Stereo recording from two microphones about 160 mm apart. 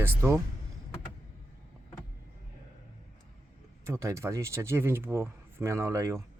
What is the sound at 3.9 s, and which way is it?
Speech, 20° right (ahead or behind).